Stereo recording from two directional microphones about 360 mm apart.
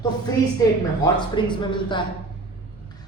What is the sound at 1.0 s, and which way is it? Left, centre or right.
A woman's voice, centre.